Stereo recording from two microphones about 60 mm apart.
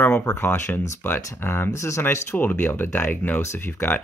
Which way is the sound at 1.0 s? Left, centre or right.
Left.